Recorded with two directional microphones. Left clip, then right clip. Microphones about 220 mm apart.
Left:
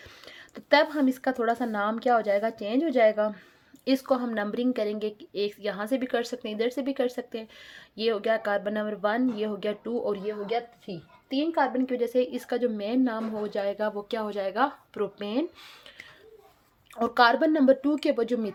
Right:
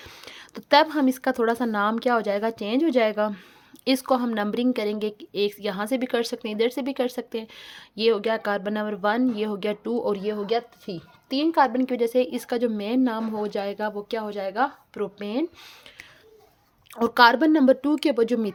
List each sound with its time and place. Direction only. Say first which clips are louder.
0.0 s a woman's voice: right 4 dB; 35° right (ahead or behind)
16.9 s a woman's voice: right 4 dB; 35° right (ahead or behind)